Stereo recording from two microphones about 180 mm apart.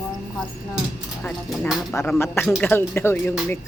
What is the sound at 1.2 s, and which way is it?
Speech, 5° left (ahead or behind).